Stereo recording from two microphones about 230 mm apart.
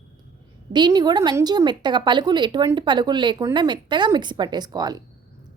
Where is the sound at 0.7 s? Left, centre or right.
Centre.